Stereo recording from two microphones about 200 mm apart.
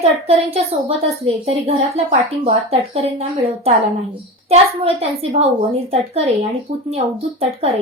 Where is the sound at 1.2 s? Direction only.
30° right (ahead or behind).